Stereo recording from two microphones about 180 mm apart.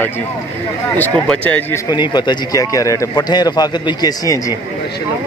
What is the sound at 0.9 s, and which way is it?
Speech, 10° left (ahead or behind).